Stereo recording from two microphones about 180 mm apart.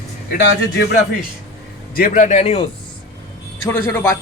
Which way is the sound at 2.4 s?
30° left (ahead or behind).